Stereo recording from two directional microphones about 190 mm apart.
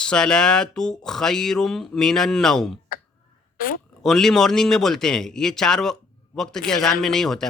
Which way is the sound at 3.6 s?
50° left (ahead or behind).